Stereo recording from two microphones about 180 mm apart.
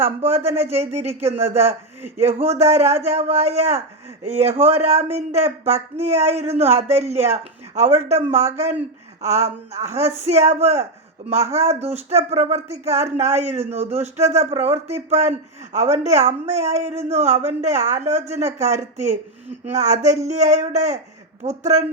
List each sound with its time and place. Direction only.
0.2 s speech: 35° right (ahead or behind)
0.6 s speech: 15° right (ahead or behind)
1.0 s speech: 35° right (ahead or behind)
1.6 s a man's voice: 10° right (ahead or behind)
2.1 s speech: 35° right (ahead or behind)